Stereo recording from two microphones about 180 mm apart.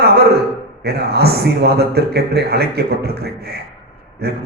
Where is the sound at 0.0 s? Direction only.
60° right (ahead or behind).